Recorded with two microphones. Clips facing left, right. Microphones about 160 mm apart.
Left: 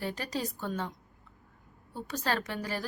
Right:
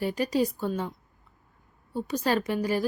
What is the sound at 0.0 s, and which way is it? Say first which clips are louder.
A woman's voice: right 9 dB; 10° right (ahead or behind).